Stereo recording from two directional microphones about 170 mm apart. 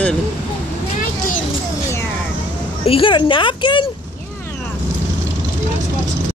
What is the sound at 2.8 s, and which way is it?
Speech, 30° left (ahead or behind).